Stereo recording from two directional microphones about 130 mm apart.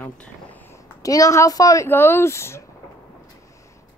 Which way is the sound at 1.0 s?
25° left (ahead or behind).